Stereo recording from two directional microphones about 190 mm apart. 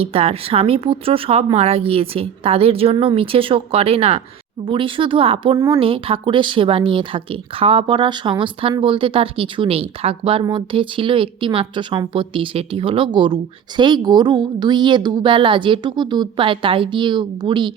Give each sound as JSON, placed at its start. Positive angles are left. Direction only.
{"t": 0.0, "sound": "a woman's voice", "side_deg": -30}
{"t": 5.8, "sound": "speech", "side_deg": -30}